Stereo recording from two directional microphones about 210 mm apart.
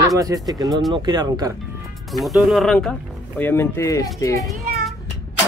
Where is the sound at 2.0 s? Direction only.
Centre (ahead or behind).